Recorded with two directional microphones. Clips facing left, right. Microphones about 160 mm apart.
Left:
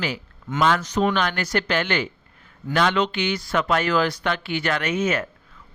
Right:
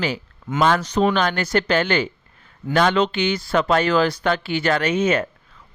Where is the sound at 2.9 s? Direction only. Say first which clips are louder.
Right 3 dB; 30° right (ahead or behind).